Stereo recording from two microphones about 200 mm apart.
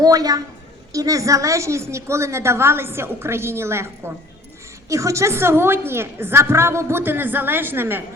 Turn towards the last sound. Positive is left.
turn(degrees=-10)  # may be behind; listen again after turning